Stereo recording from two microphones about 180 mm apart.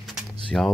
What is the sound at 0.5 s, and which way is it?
Speech, 5° left (ahead or behind).